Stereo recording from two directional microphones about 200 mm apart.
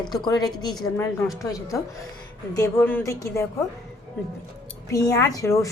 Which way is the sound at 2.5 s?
15° left (ahead or behind).